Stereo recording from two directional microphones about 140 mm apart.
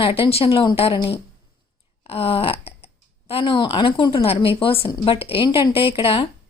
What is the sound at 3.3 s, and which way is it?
A woman's voice, 40° left (ahead or behind).